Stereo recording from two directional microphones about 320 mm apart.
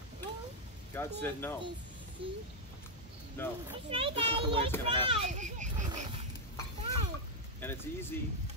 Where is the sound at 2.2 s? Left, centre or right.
Centre.